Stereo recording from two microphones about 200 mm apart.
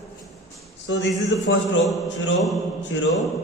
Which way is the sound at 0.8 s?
65° left (ahead or behind).